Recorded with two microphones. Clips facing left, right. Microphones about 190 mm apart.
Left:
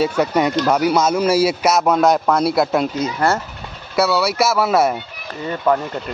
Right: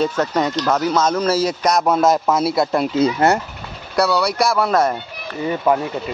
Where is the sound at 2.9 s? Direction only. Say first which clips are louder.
Right 4 dB; 25° right (ahead or behind).